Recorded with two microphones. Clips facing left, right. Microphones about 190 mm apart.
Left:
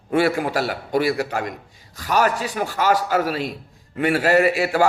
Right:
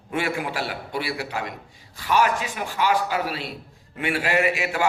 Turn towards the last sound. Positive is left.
turn(degrees=40)  # may be behind; listen again after turning